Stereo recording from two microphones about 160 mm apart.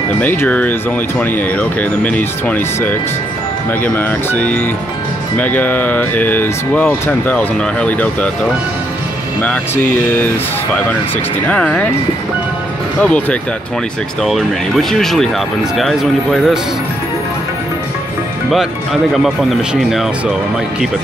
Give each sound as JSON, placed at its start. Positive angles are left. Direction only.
{"t": 0.2, "sound": "speech", "side_deg": 10}
{"t": 10.0, "sound": "speech", "side_deg": 10}
{"t": 11.4, "sound": "speech", "side_deg": 5}
{"t": 13.0, "sound": "speech", "side_deg": 5}
{"t": 19.1, "sound": "speech", "side_deg": 0}